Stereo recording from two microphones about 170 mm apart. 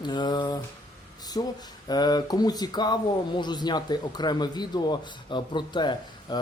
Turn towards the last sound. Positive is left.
turn(degrees=25)  # may be behind; listen again after turning